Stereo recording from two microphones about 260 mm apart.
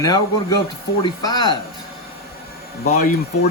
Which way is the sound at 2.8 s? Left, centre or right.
Left.